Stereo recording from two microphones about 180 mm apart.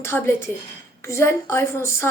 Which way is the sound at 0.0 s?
15° left (ahead or behind).